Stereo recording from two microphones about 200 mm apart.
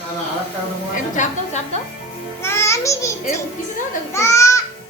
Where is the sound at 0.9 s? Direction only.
40° left (ahead or behind).